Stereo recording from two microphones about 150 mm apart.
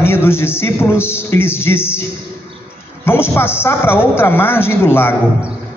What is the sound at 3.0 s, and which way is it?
A man's voice, 15° left (ahead or behind).